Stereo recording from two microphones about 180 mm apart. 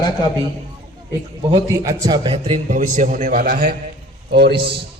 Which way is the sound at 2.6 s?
45° right (ahead or behind).